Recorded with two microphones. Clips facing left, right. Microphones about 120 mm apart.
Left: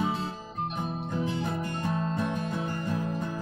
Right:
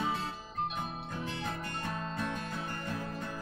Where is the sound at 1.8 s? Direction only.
15° left (ahead or behind).